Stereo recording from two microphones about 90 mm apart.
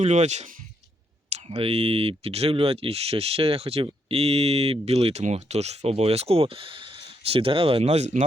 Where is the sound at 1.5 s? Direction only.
90° right.